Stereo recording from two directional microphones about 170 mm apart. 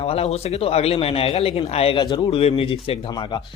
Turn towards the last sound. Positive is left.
turn(degrees=30)  # may be behind; listen again after turning